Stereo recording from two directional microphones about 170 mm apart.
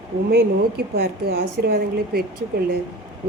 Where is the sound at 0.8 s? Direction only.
65° right (ahead or behind).